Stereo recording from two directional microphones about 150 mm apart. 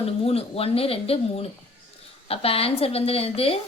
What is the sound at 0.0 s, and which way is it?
A woman's voice, 40° left (ahead or behind).